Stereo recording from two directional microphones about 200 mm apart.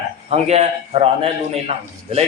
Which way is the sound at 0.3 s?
30° right (ahead or behind).